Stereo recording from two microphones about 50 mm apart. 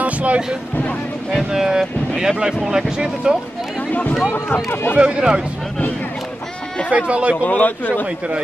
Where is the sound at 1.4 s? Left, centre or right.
Centre.